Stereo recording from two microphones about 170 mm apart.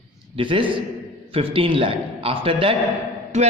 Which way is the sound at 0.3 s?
30° right (ahead or behind).